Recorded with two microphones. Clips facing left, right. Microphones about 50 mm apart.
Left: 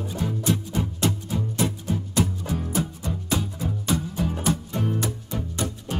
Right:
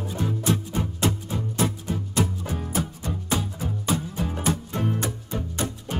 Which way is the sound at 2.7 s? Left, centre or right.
Right.